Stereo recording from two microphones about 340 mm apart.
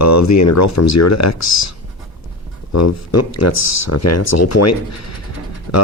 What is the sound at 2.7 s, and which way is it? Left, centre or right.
Speech, left.